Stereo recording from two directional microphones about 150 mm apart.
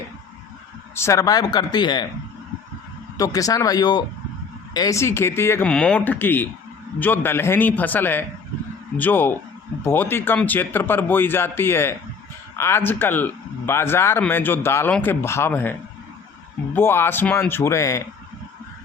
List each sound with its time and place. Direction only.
0.9 s speech: 20° left (ahead or behind)
3.2 s speech: 25° left (ahead or behind)
16.7 s speech: 15° left (ahead or behind)